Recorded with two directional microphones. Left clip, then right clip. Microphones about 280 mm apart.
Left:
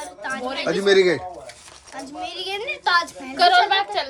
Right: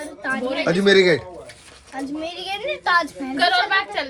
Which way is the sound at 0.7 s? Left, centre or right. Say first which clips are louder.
Right 1 dB; right.